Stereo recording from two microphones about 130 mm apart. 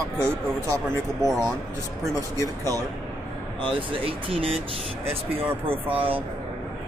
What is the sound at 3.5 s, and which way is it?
Speech, 40° right (ahead or behind).